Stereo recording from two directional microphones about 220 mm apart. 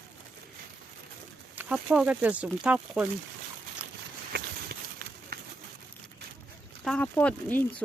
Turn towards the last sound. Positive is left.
turn(degrees=5)  # may be behind; listen again after turning